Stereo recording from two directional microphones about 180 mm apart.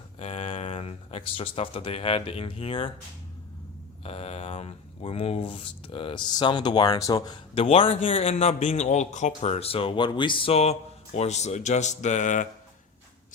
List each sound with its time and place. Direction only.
0.2 s speech: 35° left (ahead or behind)
4.0 s speech: 35° left (ahead or behind)